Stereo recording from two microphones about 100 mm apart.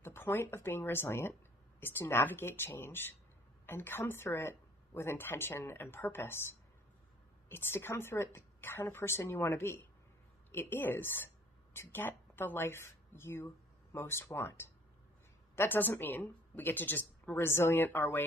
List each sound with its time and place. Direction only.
0.0 s a woman's voice: 25° left (ahead or behind)
7.4 s a woman's voice: 25° left (ahead or behind)